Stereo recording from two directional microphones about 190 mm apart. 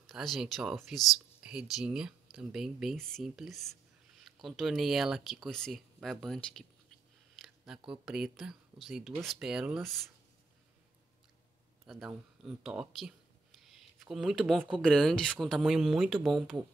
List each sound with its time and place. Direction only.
0.0 s speech: centre (ahead or behind)
11.8 s speech: centre (ahead or behind)